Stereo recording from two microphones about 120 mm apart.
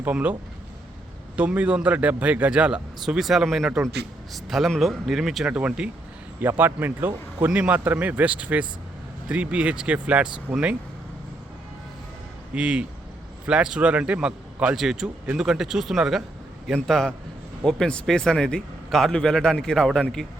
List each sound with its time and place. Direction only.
0.0 s a man's voice: 15° right (ahead or behind)
1.4 s a man's voice: 10° right (ahead or behind)
12.5 s a man's voice: 10° right (ahead or behind)